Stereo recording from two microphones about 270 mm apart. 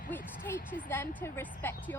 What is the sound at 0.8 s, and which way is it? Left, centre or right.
Speech, centre.